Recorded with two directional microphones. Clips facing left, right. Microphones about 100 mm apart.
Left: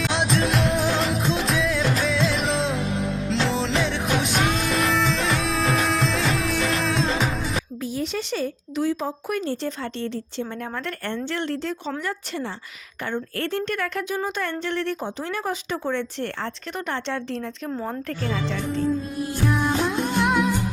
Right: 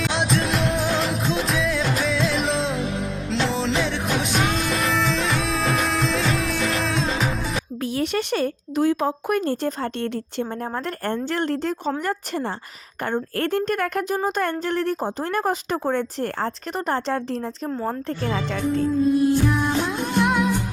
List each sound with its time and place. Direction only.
0.0 s music: centre (ahead or behind)
7.9 s speech: 60° right (ahead or behind); by 17.5 s 40° right (ahead or behind)
17.7 s speech: 5° right (ahead or behind)
18.1 s speech: 35° right (ahead or behind)
18.9 s music: centre (ahead or behind)